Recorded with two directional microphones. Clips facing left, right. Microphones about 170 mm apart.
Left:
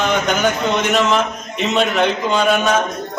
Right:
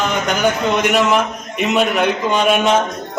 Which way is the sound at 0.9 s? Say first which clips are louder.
Right 1 dB; 10° right (ahead or behind).